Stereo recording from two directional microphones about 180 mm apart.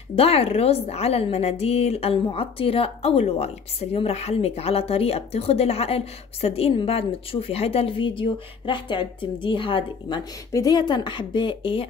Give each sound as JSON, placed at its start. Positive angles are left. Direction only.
{"t": 0.1, "sound": "a woman's voice", "side_deg": 35}